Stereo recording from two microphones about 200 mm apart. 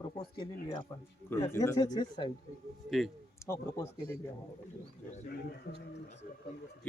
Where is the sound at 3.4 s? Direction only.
15° left (ahead or behind).